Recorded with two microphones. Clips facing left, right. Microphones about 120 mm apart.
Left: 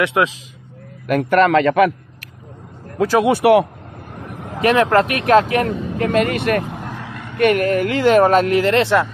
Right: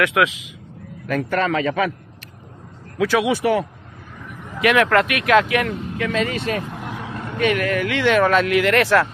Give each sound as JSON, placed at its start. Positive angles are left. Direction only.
{"t": 0.0, "sound": "speech", "side_deg": 30}
{"t": 1.0, "sound": "a man's voice", "side_deg": 60}
{"t": 3.0, "sound": "speech", "side_deg": 45}
{"t": 3.3, "sound": "a man's voice", "side_deg": 70}
{"t": 4.2, "sound": "vehicle", "side_deg": 75}
{"t": 4.6, "sound": "speech", "side_deg": 35}
{"t": 7.3, "sound": "speech", "side_deg": 50}